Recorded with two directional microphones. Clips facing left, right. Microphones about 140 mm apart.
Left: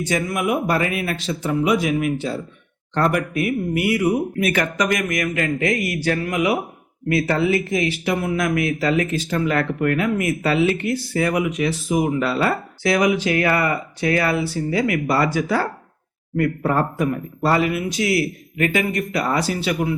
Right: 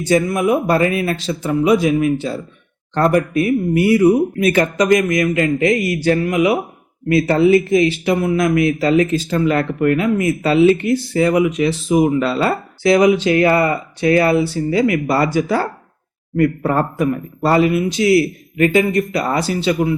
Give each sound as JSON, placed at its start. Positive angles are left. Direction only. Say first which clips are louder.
{"t": 0.0, "sound": "speech", "louder": "right 6 dB", "side_deg": -35}
{"t": 16.6, "sound": "speech", "louder": "right 3 dB", "side_deg": -25}